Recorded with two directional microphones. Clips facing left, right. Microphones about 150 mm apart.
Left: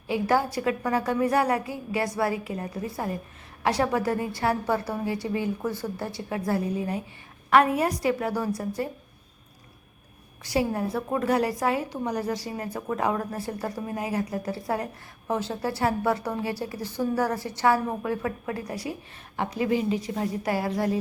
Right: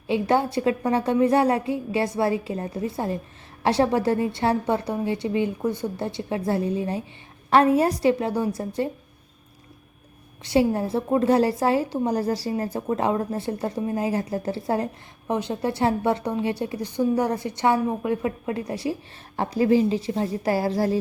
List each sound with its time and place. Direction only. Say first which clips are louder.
0.1 s a woman's voice: right 3 dB; 25° right (ahead or behind)
10.4 s a woman's voice: right 5 dB; 25° right (ahead or behind)